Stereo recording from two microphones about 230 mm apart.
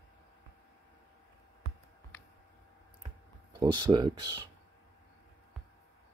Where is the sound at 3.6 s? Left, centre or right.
Centre.